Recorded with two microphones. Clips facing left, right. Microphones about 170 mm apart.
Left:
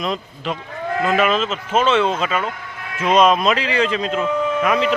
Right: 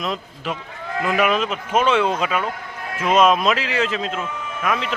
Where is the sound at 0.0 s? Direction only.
5° right (ahead or behind).